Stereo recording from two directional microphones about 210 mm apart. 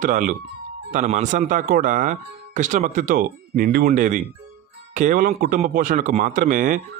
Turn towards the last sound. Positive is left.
turn(degrees=-40)  # may be behind; listen again after turning